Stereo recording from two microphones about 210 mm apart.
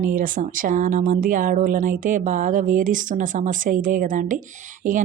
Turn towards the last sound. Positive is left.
turn(degrees=-40)  # may be behind; listen again after turning